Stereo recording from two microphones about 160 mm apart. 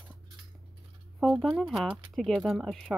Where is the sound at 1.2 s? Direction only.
Centre (ahead or behind).